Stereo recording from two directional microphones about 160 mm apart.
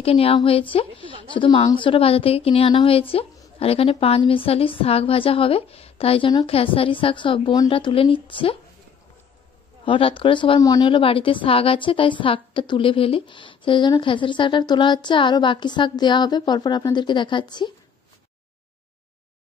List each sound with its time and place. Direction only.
0.0 s speech: 40° left (ahead or behind)
9.8 s speech: 35° left (ahead or behind)